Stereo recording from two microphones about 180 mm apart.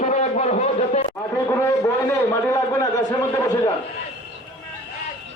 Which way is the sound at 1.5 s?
15° left (ahead or behind).